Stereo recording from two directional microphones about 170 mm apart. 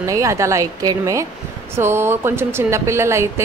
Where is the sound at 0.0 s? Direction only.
20° right (ahead or behind).